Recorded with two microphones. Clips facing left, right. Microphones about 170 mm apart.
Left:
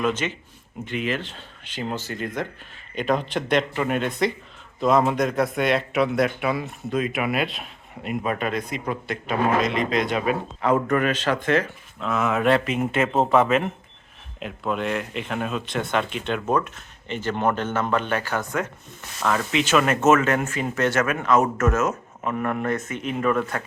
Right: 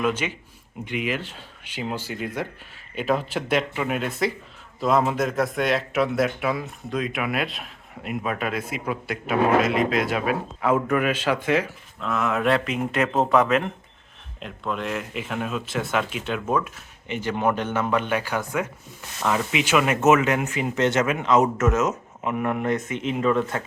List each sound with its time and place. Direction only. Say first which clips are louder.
0.0 s speech: even; 10° right (ahead or behind)
11.9 s speech: left 1 dB; centre (ahead or behind); by 23.4 s 20° right (ahead or behind)